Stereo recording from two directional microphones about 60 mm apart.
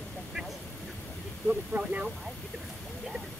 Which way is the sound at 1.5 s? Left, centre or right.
Right.